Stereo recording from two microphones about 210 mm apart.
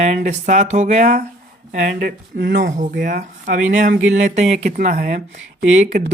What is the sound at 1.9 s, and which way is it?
Speech, 50° right (ahead or behind).